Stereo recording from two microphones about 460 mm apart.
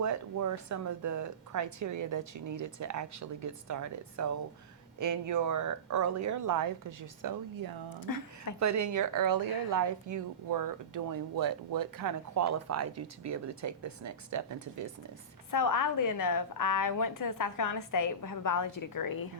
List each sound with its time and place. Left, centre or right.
0.0 s speech: right
8.0 s a woman's voice: left
8.5 s speech: right
15.4 s a woman's voice: left